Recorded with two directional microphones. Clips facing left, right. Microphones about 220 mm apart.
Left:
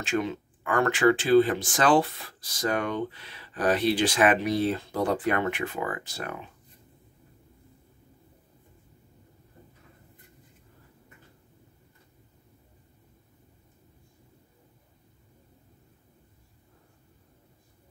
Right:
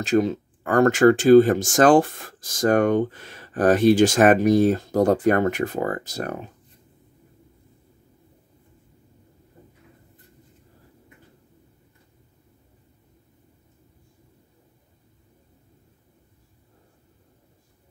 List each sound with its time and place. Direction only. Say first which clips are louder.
0.0 s speech: right 8 dB; 40° right (ahead or behind)